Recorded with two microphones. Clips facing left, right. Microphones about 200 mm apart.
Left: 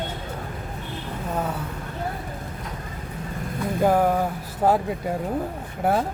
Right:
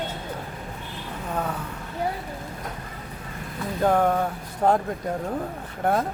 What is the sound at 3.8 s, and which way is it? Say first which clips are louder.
Speech: left 1 dB; 5° left (ahead or behind).